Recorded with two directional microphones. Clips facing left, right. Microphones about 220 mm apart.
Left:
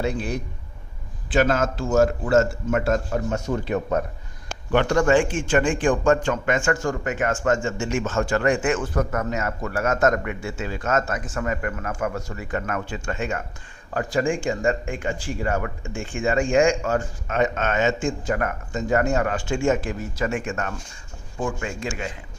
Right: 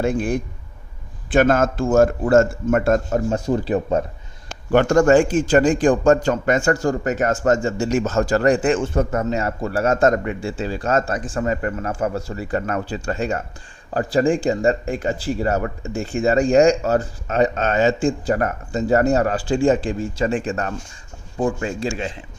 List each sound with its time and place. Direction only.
0.0 s speech: 50° right (ahead or behind)
3.2 s a man's voice: 35° right (ahead or behind)
4.7 s a man's voice: 45° right (ahead or behind); by 22.2 s 30° right (ahead or behind)